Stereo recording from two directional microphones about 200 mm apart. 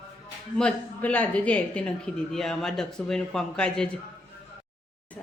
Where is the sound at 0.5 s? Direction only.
5° left (ahead or behind).